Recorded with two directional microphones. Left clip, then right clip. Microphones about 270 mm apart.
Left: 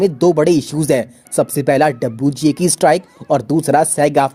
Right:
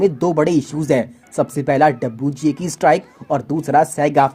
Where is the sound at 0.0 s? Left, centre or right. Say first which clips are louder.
Left 3 dB; left.